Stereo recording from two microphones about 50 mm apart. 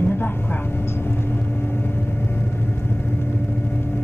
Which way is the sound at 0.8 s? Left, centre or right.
Left.